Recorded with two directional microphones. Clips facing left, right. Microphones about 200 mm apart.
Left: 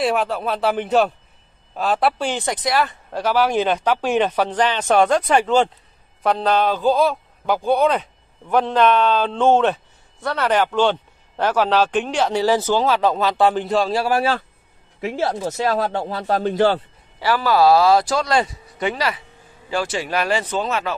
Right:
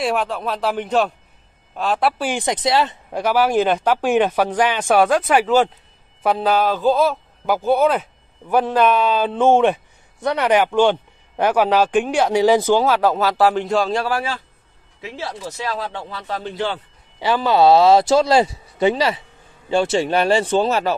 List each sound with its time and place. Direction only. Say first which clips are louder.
0.0 s speech: left 1 dB; centre (ahead or behind)
2.4 s speech: right 4 dB; 25° right (ahead or behind)
3.1 s speech: right 1 dB; 10° right (ahead or behind)
15.0 s speech: left 7 dB; 50° left (ahead or behind)
17.2 s speech: right 1 dB; 20° right (ahead or behind); by 20.9 s 35° right (ahead or behind)